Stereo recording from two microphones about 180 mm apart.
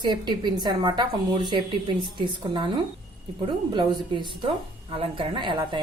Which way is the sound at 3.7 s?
25° right (ahead or behind).